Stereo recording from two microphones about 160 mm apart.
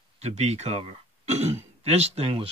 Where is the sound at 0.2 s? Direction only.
45° right (ahead or behind).